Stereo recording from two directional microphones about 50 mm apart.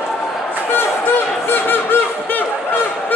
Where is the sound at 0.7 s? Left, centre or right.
Left.